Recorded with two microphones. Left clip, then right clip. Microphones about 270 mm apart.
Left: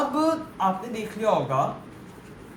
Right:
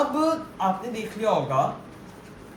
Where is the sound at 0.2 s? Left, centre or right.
Left.